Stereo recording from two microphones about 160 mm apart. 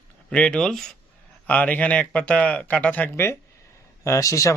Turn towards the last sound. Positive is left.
turn(degrees=20)  # may be behind; listen again after turning